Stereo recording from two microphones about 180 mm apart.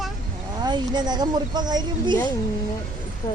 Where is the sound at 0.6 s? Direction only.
25° right (ahead or behind).